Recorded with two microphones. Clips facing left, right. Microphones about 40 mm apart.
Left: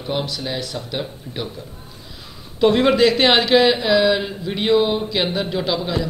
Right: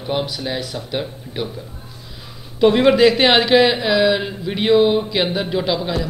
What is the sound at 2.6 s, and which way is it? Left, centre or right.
A man's voice, centre.